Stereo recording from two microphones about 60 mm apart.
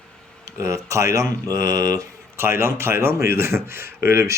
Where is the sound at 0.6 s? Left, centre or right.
Right.